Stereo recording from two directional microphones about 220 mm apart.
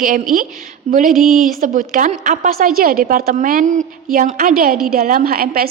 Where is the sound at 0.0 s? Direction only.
40° right (ahead or behind).